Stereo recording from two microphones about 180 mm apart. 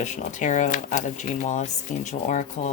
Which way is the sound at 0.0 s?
40° left (ahead or behind).